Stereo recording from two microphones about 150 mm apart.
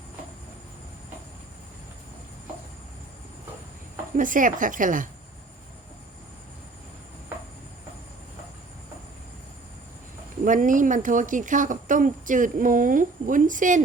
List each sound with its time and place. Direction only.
4.2 s a woman's voice: 60° right (ahead or behind)
10.4 s a woman's voice: 60° right (ahead or behind)